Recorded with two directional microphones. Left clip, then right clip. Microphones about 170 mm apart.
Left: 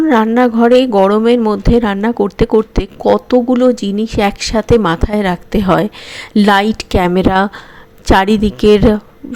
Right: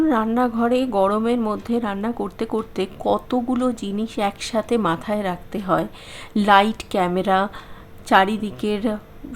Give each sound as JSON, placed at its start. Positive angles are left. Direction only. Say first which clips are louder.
{"t": 0.0, "sound": "speech", "louder": "left 9 dB", "side_deg": 35}